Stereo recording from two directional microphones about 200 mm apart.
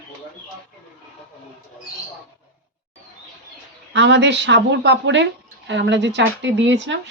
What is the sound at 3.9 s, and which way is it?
Speech, 60° right (ahead or behind).